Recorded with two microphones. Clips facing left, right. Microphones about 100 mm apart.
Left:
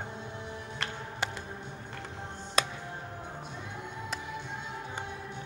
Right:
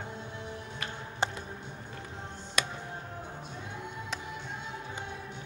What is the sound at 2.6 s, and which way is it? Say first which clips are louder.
Music: left 3 dB; 35° left (ahead or behind).